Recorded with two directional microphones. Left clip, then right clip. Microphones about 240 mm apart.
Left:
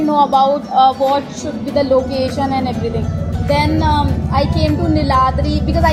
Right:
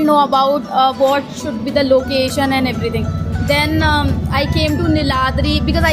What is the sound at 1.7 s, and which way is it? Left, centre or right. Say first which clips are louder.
A woman's voice: right 1 dB; right.